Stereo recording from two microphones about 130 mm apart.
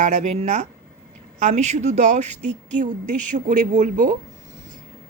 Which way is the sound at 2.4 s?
75° right (ahead or behind).